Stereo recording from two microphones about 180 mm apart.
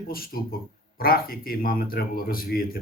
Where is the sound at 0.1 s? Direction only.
55° left (ahead or behind).